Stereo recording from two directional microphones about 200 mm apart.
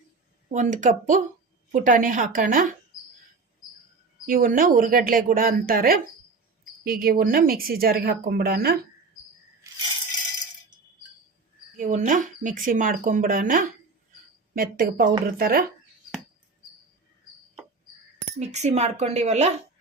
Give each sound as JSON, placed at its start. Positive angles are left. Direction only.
{"t": 0.4, "sound": "speech", "side_deg": -40}
{"t": 4.3, "sound": "speech", "side_deg": -45}
{"t": 11.8, "sound": "speech", "side_deg": -40}
{"t": 18.3, "sound": "speech", "side_deg": -35}